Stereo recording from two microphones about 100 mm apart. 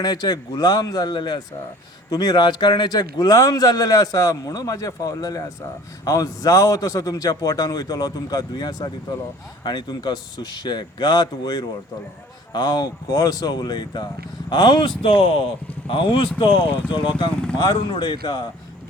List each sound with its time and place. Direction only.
0.0 s a man's voice: 40° left (ahead or behind)